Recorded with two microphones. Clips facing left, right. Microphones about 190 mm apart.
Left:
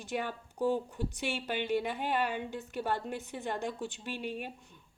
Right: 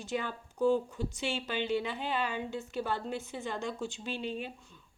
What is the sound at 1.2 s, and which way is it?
Speech, 55° left (ahead or behind).